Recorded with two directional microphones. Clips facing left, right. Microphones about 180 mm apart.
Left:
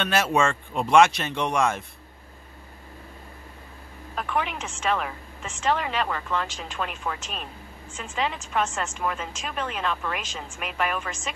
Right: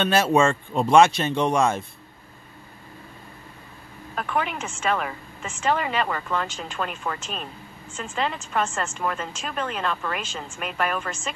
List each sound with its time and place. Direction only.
0.0 s speech: 30° right (ahead or behind)
4.1 s a woman's voice: centre (ahead or behind)